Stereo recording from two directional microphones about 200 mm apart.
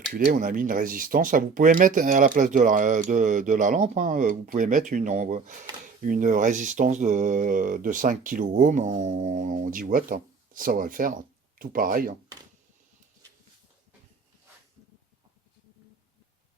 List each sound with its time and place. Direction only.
0.1 s speech: 45° right (ahead or behind)